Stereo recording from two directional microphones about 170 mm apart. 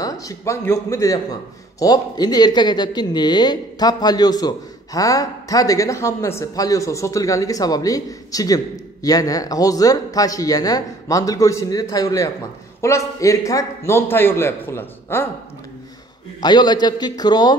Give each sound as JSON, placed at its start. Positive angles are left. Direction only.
{"t": 0.0, "sound": "a man's voice", "side_deg": 20}
{"t": 16.3, "sound": "speech", "side_deg": 25}